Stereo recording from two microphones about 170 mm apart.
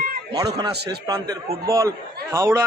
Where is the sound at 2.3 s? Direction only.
15° right (ahead or behind).